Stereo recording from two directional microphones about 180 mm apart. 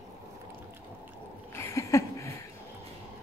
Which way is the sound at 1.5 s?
15° left (ahead or behind).